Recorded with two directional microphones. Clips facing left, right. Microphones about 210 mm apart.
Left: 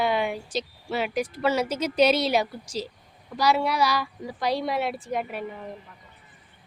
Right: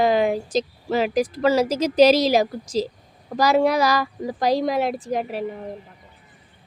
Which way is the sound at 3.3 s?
45° right (ahead or behind).